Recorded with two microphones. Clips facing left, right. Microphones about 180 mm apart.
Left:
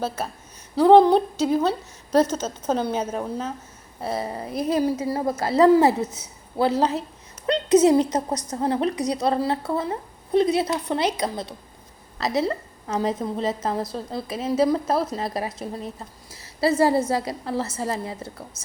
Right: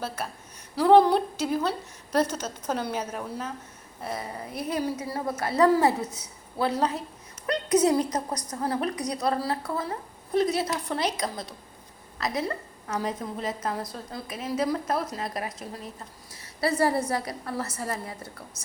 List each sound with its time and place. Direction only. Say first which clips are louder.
0.8 s a woman's voice: left 4 dB; 25° left (ahead or behind)
16.3 s a sound: left 6 dB; 25° left (ahead or behind)
17.1 s a woman's voice: left 5 dB; 25° left (ahead or behind)